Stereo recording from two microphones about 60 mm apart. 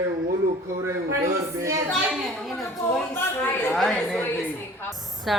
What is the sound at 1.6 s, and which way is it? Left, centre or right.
Speech, right.